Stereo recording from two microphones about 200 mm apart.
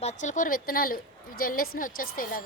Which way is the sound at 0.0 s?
35° left (ahead or behind).